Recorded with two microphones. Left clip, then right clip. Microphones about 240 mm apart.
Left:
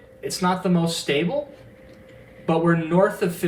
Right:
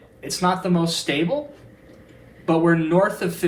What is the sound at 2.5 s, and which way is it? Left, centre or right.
Speech, right.